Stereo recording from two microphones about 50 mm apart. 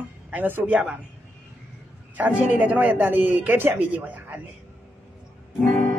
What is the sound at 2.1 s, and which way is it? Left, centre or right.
A man's voice, right.